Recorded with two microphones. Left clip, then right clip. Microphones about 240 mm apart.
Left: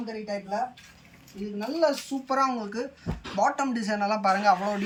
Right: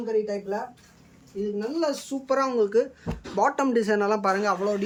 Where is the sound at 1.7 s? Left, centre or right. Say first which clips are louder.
Left 6 dB; centre.